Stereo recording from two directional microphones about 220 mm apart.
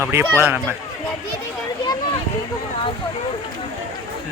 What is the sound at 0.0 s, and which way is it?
Speech, 10° right (ahead or behind).